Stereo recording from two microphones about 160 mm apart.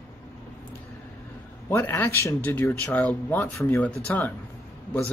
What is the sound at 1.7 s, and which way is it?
Speech, 15° left (ahead or behind).